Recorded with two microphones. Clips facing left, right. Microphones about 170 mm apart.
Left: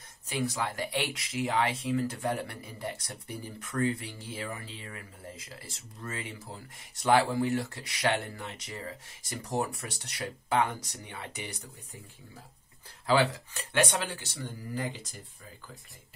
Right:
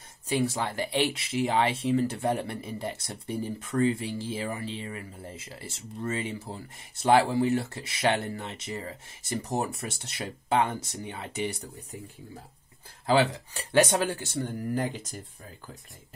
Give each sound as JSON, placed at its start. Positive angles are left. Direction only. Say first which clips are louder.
{"t": 0.3, "sound": "speech", "louder": "right 4 dB", "side_deg": -30}
{"t": 13.1, "sound": "speech", "louder": "right 2 dB", "side_deg": -35}